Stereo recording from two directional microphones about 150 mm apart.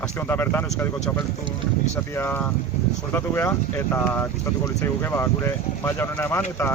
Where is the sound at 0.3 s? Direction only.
15° left (ahead or behind).